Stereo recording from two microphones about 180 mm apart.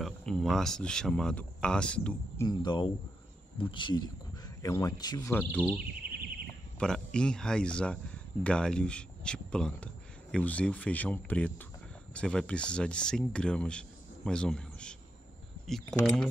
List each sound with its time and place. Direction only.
0.0 s speech: 5° left (ahead or behind)
2.4 s speech: 25° left (ahead or behind)
5.3 s speech: 10° left (ahead or behind)
6.8 s speech: 5° left (ahead or behind)